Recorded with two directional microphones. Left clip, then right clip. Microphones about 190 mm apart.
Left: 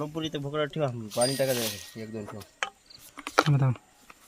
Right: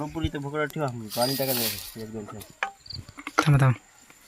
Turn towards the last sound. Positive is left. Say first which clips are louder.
# right 1 dB
turn(degrees=-5)  # may be behind; listen again after turning